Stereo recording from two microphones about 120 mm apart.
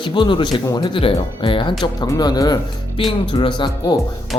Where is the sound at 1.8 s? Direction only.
35° left (ahead or behind).